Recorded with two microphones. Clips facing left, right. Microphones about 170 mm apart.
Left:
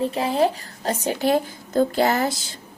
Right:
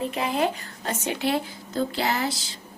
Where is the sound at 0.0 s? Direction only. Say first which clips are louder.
Left 4 dB; 35° left (ahead or behind).